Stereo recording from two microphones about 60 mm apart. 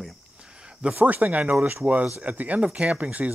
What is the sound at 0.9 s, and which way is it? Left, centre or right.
Speech, right.